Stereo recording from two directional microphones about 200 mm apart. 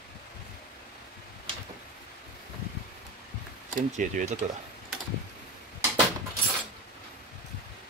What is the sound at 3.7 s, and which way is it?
Speech, 40° right (ahead or behind).